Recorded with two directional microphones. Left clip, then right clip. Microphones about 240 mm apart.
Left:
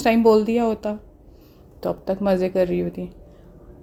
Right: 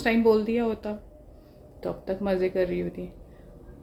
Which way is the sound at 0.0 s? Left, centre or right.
Left.